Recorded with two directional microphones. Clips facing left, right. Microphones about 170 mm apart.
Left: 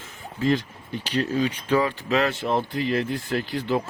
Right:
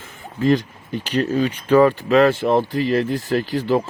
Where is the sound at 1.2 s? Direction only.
60° right (ahead or behind).